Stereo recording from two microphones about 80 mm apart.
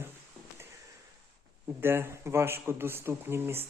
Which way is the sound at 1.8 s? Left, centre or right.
Right.